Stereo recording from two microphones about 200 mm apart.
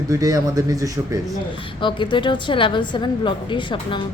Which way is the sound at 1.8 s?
25° left (ahead or behind).